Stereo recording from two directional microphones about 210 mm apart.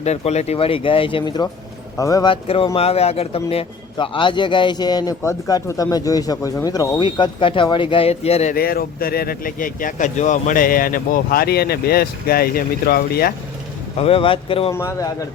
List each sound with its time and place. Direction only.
0.0 s a man's voice: 30° left (ahead or behind)
8.5 s speech: 45° left (ahead or behind)
14.0 s a man's voice: 25° left (ahead or behind)
14.7 s speech: 15° left (ahead or behind)